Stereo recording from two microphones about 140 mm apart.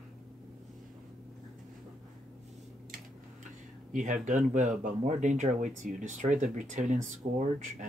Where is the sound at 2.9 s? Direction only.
70° right (ahead or behind).